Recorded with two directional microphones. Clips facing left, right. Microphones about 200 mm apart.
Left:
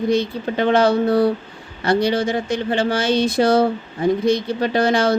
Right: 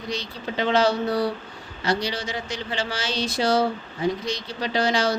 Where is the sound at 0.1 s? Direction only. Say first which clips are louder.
Left 11 dB; 55° left (ahead or behind).